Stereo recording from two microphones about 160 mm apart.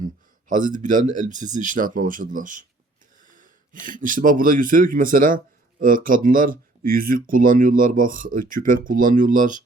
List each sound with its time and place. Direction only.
0.0 s speech: 55° right (ahead or behind)
3.8 s speech: 55° right (ahead or behind)